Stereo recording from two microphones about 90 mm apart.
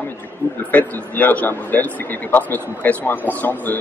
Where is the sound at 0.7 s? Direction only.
20° left (ahead or behind).